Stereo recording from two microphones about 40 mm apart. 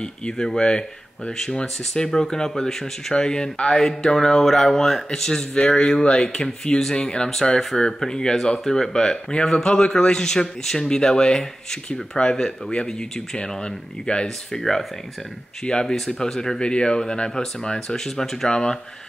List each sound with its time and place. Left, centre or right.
0.0 s speech: left
1.6 s speech: left
7.5 s speech: centre
14.2 s speech: centre
15.6 s speech: left
17.7 s speech: centre
18.5 s speech: centre